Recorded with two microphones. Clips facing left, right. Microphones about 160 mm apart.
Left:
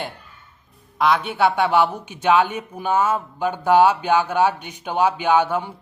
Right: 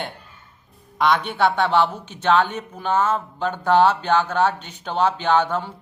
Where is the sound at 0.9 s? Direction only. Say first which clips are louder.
Left 1 dB; 5° left (ahead or behind).